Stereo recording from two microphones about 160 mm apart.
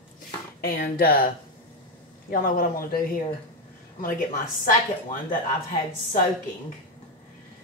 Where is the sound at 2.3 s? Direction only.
60° left (ahead or behind).